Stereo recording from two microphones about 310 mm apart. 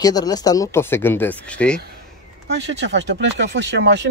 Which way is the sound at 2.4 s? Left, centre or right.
Right.